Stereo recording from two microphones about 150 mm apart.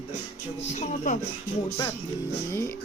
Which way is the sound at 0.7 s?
50° left (ahead or behind).